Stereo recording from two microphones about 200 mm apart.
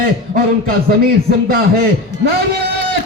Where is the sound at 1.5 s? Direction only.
50° right (ahead or behind).